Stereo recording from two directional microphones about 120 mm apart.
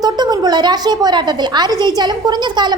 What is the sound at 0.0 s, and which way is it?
A woman's voice, 35° right (ahead or behind).